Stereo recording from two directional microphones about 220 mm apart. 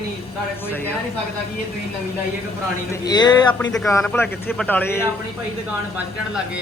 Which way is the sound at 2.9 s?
20° left (ahead or behind).